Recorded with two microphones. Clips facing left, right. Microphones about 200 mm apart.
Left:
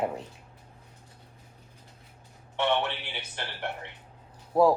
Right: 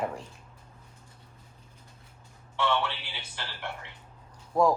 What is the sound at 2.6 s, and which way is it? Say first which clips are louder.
Speech: left 2 dB; 20° left (ahead or behind).